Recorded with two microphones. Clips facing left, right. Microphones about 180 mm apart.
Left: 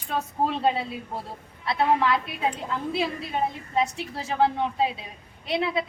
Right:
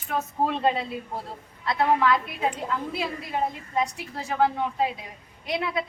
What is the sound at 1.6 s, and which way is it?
A woman's voice, 25° left (ahead or behind).